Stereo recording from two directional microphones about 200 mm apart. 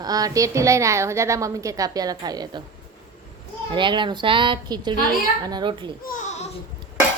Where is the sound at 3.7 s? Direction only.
25° right (ahead or behind).